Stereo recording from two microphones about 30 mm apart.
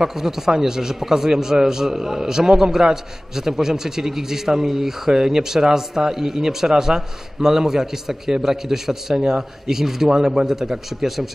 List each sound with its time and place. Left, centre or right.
0.0 s a man's voice: centre